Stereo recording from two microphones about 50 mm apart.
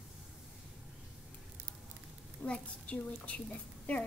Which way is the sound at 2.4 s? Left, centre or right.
Left.